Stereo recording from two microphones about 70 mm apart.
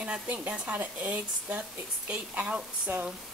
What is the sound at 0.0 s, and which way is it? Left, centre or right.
Speech, centre.